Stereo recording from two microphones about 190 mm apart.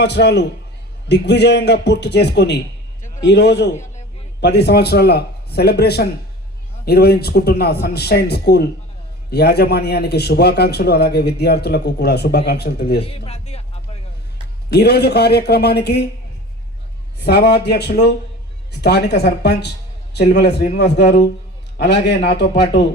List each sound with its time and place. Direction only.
0.0 s a man's voice: 65° left (ahead or behind)
13.1 s speech: 30° left (ahead or behind)
14.7 s a man's voice: 60° left (ahead or behind)
17.2 s a man's voice: 60° left (ahead or behind)